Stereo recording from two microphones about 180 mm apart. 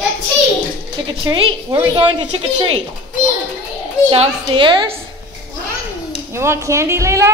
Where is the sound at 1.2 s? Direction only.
30° right (ahead or behind).